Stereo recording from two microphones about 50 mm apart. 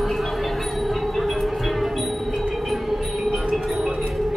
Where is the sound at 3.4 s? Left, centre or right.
Centre.